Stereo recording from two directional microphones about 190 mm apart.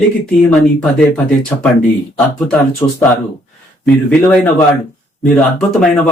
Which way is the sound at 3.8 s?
5° left (ahead or behind).